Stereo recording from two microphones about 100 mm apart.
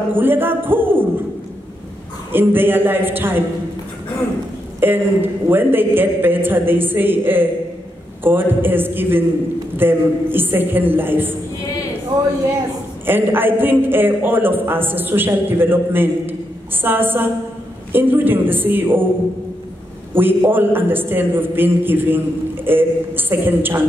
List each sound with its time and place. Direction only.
0.1 s a man's voice: 20° right (ahead or behind)
2.3 s a man's voice: 20° right (ahead or behind)
4.7 s a man's voice: 20° right (ahead or behind)
13.0 s a man's voice: 20° right (ahead or behind)
20.2 s a man's voice: 20° right (ahead or behind)